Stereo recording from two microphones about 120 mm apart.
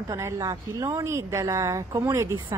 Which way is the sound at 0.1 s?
30° right (ahead or behind).